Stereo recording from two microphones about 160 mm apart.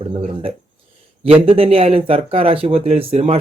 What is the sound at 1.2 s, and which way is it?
Speech, 35° right (ahead or behind).